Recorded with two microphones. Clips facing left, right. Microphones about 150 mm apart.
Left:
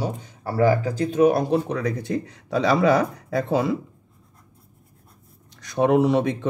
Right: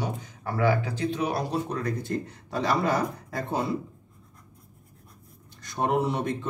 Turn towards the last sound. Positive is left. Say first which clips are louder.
# left 8 dB
turn(degrees=85)